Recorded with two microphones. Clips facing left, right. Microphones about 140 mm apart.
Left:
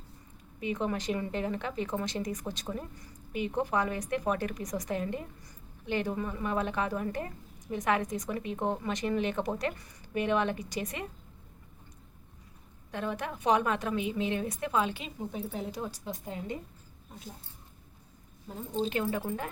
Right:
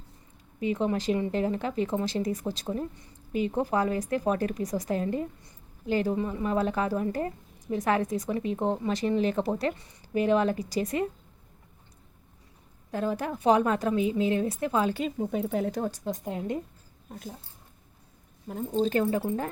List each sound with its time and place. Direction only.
0.6 s speech: 30° right (ahead or behind)
12.9 s speech: 35° right (ahead or behind)
15.3 s speech: 75° right (ahead or behind)
15.7 s a woman's voice: 50° right (ahead or behind)
18.8 s speech: 40° right (ahead or behind)